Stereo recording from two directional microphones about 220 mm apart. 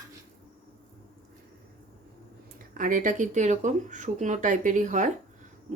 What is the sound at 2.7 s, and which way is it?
Speech, 35° right (ahead or behind).